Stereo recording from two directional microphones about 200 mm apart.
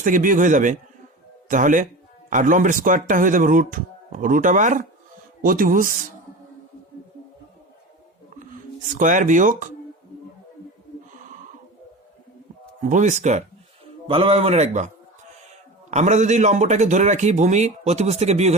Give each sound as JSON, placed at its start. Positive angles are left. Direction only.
{"t": 0.0, "sound": "a man's voice", "side_deg": -40}
{"t": 9.0, "sound": "a man's voice", "side_deg": -40}
{"t": 12.9, "sound": "a man's voice", "side_deg": -40}
{"t": 15.9, "sound": "a man's voice", "side_deg": -35}